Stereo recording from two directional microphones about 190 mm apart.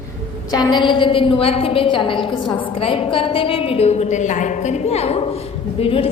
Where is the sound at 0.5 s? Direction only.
20° left (ahead or behind).